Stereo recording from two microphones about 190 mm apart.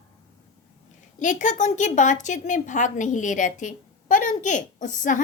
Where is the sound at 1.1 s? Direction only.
40° left (ahead or behind).